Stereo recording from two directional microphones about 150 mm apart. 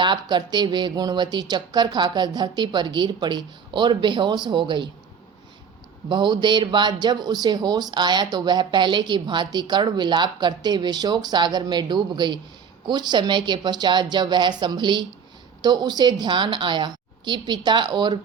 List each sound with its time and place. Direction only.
0.0 s speech: 30° right (ahead or behind)
6.1 s a woman's voice: 30° right (ahead or behind)